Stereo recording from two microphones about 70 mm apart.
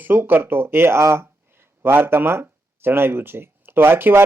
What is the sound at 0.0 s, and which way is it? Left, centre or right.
Speech, right.